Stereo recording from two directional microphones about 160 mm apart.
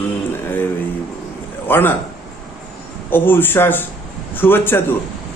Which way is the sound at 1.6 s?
15° left (ahead or behind).